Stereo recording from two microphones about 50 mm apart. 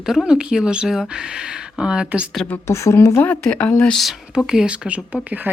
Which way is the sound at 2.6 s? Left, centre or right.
Left.